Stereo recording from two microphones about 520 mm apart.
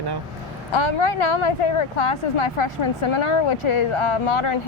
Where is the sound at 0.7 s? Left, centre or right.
Left.